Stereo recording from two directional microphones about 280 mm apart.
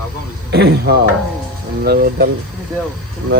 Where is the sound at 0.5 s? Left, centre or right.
Right.